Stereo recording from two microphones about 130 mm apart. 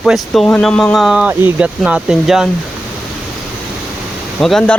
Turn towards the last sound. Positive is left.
turn(degrees=5)  # may be behind; listen again after turning